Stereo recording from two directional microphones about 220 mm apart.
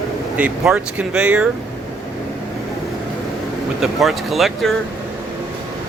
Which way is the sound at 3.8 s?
Centre (ahead or behind).